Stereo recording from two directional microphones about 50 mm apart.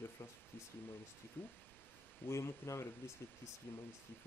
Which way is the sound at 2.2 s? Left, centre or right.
Left.